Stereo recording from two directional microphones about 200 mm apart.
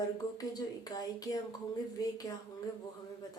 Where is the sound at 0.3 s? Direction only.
20° left (ahead or behind).